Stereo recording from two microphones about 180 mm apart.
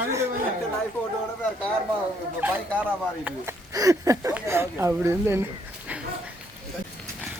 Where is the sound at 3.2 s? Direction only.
15° right (ahead or behind).